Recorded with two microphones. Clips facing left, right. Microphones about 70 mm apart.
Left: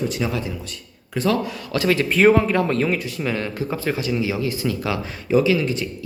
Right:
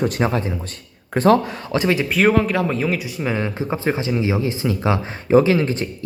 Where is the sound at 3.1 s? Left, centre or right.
Centre; by 6.1 s right.